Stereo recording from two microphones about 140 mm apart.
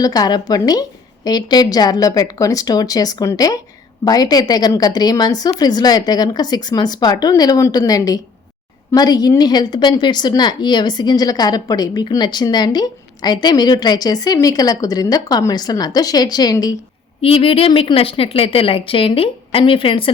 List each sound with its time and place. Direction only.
0.0 s a woman's voice: 25° left (ahead or behind)
17.2 s a woman's voice: 40° left (ahead or behind)